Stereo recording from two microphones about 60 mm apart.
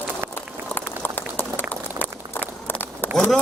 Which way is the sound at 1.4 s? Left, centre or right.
Left.